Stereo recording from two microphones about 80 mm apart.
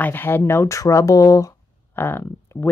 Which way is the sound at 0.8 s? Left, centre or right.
Left.